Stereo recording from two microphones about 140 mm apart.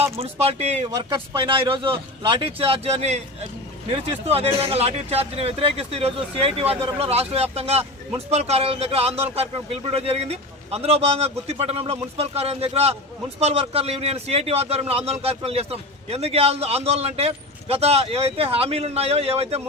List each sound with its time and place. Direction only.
0.0 s a man's voice: 45° right (ahead or behind)
1.5 s a man's voice: 35° right (ahead or behind)